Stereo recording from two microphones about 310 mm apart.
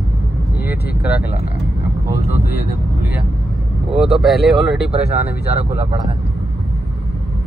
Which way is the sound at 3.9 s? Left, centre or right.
Centre.